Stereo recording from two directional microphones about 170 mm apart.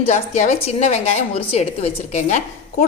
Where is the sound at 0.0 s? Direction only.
45° left (ahead or behind).